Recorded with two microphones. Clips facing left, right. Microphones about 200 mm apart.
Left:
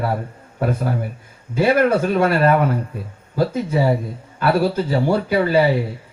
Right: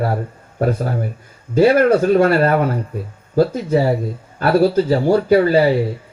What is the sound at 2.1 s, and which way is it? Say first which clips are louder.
Speech: right 2 dB; 45° right (ahead or behind).